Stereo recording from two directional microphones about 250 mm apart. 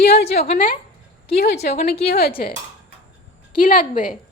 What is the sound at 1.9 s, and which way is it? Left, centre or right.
Speech, left.